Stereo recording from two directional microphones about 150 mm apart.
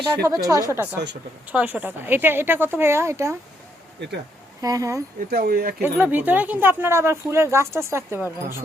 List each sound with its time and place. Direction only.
0.3 s speech: 25° right (ahead or behind)
4.6 s speech: 20° right (ahead or behind)
5.3 s speech: 90° right
5.8 s speech: 10° right (ahead or behind)